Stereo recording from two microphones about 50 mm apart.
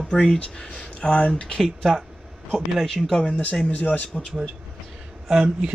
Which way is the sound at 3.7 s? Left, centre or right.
Left.